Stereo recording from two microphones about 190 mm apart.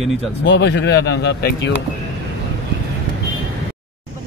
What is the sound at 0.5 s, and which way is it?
A man's voice, 65° left (ahead or behind).